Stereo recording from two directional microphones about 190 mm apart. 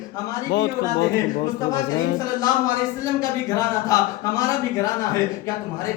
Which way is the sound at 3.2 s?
20° left (ahead or behind).